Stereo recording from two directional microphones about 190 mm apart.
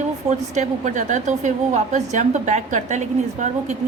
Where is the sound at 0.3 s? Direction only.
40° right (ahead or behind).